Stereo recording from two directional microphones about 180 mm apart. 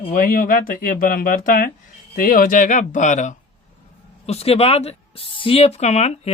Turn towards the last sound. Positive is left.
turn(degrees=35)  # may be behind; listen again after turning